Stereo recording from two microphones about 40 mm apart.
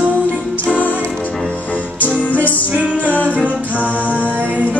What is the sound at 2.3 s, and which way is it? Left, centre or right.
Music, left.